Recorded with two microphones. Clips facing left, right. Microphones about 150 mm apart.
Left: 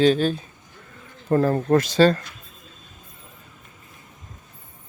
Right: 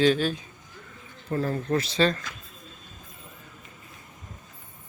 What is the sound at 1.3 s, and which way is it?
Speech, 50° left (ahead or behind).